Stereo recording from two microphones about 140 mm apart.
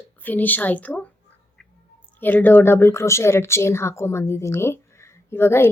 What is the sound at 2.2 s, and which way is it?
Speech, 15° left (ahead or behind).